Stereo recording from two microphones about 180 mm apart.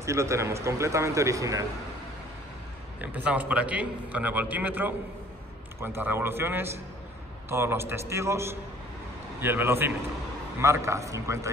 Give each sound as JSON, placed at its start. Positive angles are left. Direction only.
{"t": 0.0, "sound": "a man's voice", "side_deg": -15}
{"t": 3.0, "sound": "a man's voice", "side_deg": -10}